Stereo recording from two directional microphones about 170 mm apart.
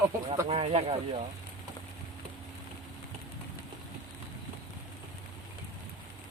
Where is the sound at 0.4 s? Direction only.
35° right (ahead or behind).